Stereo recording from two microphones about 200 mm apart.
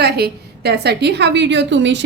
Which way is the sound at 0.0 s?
55° right (ahead or behind).